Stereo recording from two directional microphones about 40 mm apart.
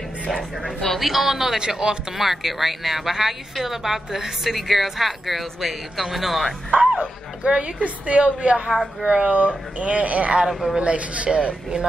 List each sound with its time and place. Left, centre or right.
0.3 s speech: centre
7.0 s speech: right
9.3 s speech: right
10.5 s a woman's voice: centre
10.8 s speech: right